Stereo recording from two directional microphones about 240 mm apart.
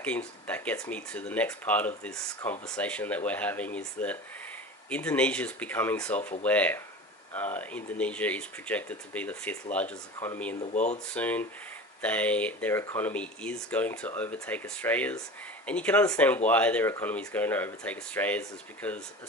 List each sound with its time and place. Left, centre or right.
0.5 s speech: centre
10.6 s speech: left
11.1 s speech: centre